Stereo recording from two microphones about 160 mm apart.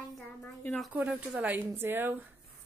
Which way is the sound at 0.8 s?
5° right (ahead or behind).